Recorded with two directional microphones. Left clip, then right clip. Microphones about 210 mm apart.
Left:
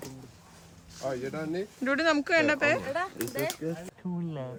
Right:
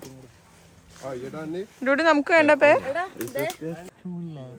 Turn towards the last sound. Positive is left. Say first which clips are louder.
# left 2 dB
turn(degrees=0)  # may be behind; listen again after turning